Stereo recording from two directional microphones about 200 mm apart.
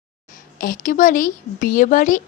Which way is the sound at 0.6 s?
40° left (ahead or behind).